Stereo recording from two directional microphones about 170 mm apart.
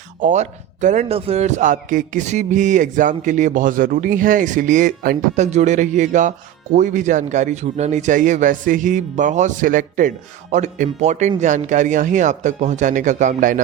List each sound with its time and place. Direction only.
0.2 s a man's voice: 45° right (ahead or behind)